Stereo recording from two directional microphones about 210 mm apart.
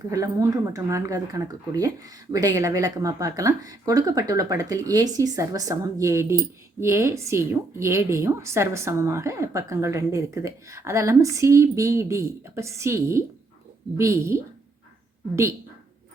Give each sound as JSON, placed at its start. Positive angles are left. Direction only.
{"t": 0.1, "sound": "speech", "side_deg": -15}